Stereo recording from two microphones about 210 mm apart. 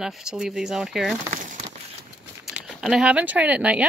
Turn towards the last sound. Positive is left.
turn(degrees=-5)  # may be behind; listen again after turning